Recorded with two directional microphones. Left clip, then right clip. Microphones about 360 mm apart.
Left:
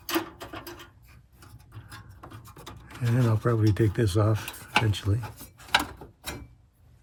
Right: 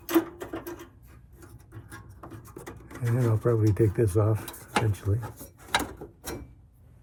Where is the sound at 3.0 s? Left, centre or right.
Left.